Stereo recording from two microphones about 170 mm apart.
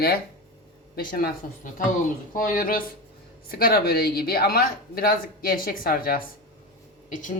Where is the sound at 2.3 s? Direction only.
55° left (ahead or behind).